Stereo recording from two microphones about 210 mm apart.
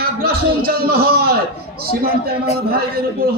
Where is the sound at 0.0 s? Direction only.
45° right (ahead or behind).